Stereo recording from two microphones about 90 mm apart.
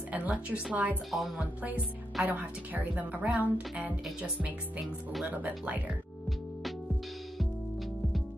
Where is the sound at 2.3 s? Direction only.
20° right (ahead or behind).